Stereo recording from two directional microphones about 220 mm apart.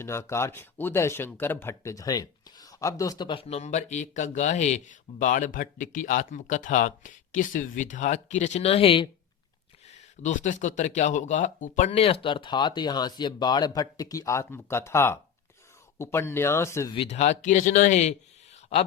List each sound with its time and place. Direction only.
0.0 s speech: 10° left (ahead or behind)
16.9 s speech: 25° left (ahead or behind)